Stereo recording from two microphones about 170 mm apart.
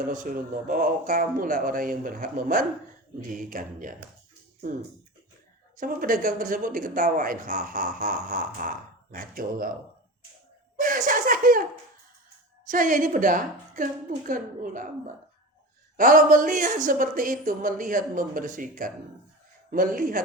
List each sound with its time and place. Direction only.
0.1 s speech: 50° right (ahead or behind)
5.7 s speech: 55° right (ahead or behind)
10.8 s laughter: 50° right (ahead or behind)
12.6 s speech: 50° right (ahead or behind)
16.0 s speech: 50° right (ahead or behind)